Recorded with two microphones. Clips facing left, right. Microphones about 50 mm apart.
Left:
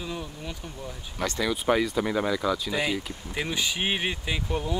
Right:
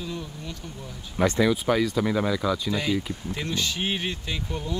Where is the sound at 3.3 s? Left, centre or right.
Centre.